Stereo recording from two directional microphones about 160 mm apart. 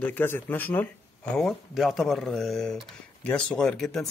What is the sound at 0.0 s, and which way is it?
Speech, 10° left (ahead or behind).